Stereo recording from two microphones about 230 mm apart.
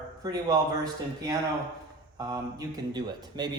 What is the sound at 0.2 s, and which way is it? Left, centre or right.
Speech, centre.